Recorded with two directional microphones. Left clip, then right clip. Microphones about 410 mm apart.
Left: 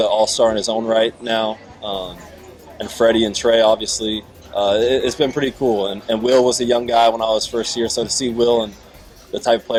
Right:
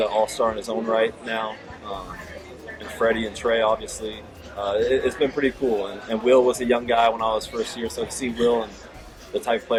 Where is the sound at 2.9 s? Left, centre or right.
Left.